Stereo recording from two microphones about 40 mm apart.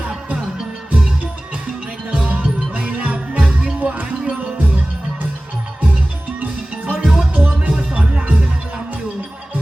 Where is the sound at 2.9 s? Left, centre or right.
Right.